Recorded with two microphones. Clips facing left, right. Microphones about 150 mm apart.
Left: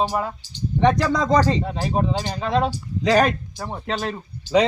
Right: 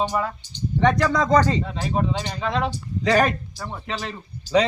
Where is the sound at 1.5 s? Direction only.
40° left (ahead or behind).